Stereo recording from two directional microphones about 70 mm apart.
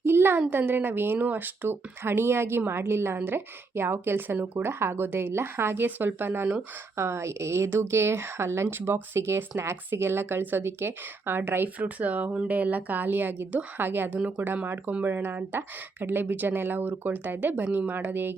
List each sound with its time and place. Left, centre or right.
0.0 s speech: right